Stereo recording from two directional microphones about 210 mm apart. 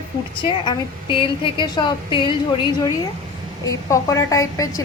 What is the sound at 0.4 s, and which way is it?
A woman's voice, 20° left (ahead or behind).